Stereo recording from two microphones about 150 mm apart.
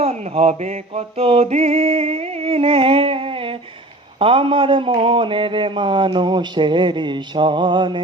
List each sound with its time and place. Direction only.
0.0 s speech: 45° right (ahead or behind)